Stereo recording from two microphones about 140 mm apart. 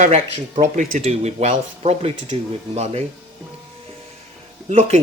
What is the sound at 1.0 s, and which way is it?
Speech, 50° right (ahead or behind).